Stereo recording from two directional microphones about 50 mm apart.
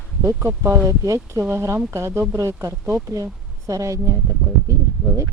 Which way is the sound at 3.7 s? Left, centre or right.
Right.